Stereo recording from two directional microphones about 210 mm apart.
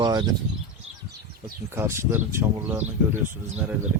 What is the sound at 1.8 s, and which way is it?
Speech, 10° right (ahead or behind).